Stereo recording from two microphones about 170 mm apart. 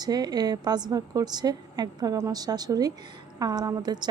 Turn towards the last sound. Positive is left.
turn(degrees=-25)  # may be behind; listen again after turning